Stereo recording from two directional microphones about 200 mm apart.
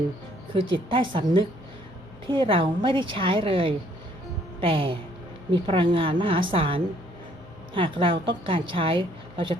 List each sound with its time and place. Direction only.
0.5 s a woman's voice: 25° right (ahead or behind)